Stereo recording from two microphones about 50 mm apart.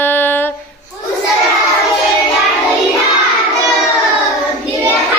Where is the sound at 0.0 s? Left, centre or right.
Left.